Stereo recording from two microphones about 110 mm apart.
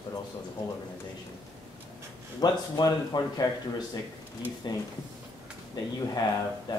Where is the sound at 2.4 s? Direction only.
40° left (ahead or behind).